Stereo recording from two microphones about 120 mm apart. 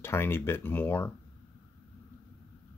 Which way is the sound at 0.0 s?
20° left (ahead or behind).